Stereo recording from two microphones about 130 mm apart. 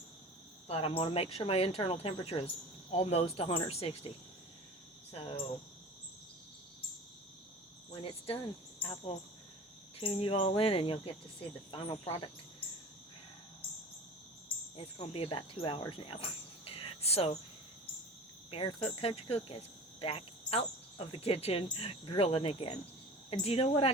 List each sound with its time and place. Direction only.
0.7 s speech: 50° left (ahead or behind)
8.8 s speech: 45° left (ahead or behind)
15.0 s speech: 45° left (ahead or behind)
15.9 s cricket: 45° left (ahead or behind)
18.5 s speech: 50° left (ahead or behind)